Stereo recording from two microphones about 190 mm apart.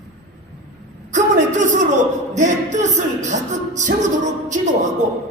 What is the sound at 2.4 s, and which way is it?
Music, 40° right (ahead or behind).